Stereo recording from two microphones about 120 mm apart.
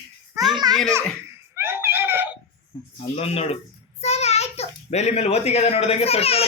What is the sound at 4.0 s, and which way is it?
A child's voice, 65° left (ahead or behind).